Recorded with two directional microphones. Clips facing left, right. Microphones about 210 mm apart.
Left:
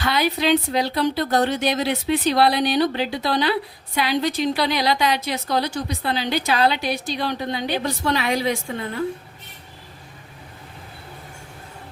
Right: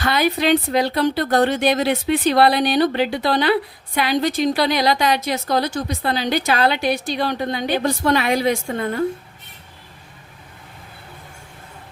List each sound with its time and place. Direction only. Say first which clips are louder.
0.0 s a woman's voice: right 2 dB; 50° right (ahead or behind)